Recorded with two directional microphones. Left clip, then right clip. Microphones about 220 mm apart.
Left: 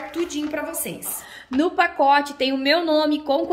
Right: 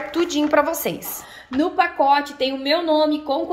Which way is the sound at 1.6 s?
25° left (ahead or behind).